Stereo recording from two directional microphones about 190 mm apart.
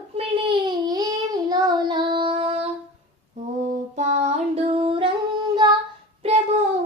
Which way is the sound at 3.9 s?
40° right (ahead or behind).